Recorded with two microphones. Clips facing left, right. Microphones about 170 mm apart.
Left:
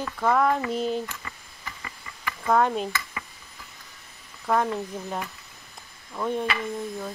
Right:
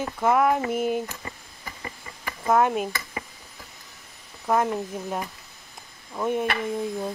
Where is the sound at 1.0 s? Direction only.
35° right (ahead or behind).